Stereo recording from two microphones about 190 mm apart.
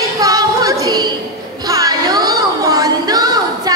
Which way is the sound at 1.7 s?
20° right (ahead or behind).